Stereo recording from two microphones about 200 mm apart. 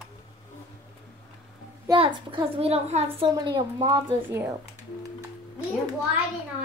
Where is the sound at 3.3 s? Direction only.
20° right (ahead or behind).